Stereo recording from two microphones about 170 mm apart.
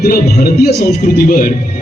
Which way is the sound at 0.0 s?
60° left (ahead or behind).